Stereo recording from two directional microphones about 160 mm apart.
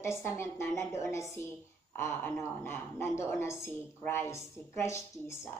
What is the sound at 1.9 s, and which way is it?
Speech, 15° left (ahead or behind).